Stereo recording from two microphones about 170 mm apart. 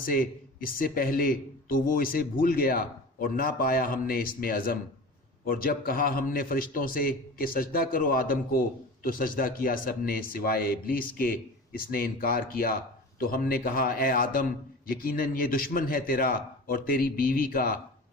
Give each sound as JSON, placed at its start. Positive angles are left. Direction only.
{"t": 0.0, "sound": "speech", "side_deg": 55}